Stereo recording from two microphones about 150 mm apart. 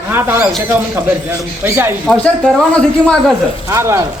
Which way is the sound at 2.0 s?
5° left (ahead or behind).